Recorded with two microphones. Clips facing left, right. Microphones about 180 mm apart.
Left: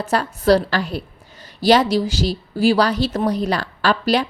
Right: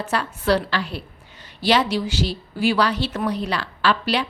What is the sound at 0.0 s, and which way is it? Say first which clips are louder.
A woman's voice: left 5 dB; 40° left (ahead or behind).